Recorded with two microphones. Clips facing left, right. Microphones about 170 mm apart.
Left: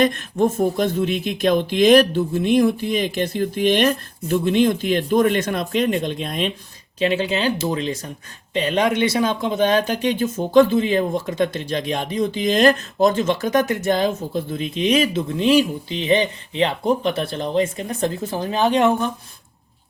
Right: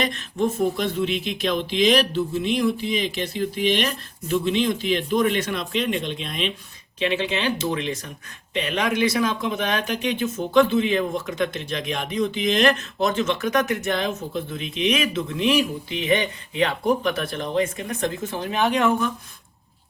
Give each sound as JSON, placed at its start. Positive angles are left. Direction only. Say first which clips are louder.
{"t": 0.0, "sound": "speech", "louder": "left 6 dB", "side_deg": 50}